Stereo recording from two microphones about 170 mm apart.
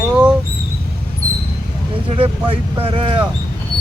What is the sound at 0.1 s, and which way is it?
Mouse, 5° right (ahead or behind).